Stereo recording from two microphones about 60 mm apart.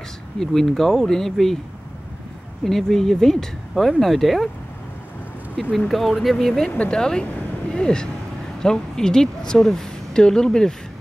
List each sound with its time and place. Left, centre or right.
0.4 s a woman's voice: centre
2.6 s a woman's voice: centre
5.6 s a woman's voice: centre
6.7 s a woman's voice: centre